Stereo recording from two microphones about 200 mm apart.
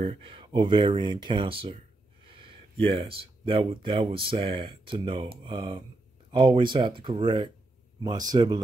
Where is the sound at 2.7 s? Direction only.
30° right (ahead or behind).